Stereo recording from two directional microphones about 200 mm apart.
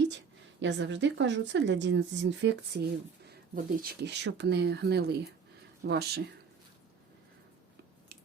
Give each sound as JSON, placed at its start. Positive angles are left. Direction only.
{"t": 0.6, "sound": "speech", "side_deg": -65}
{"t": 3.5, "sound": "speech", "side_deg": -45}